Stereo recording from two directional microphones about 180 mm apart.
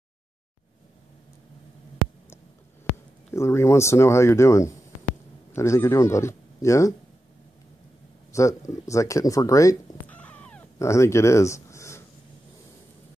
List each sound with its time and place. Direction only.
3.3 s speech: 15° left (ahead or behind)
8.3 s speech: 15° left (ahead or behind)
10.1 s cat: 10° left (ahead or behind)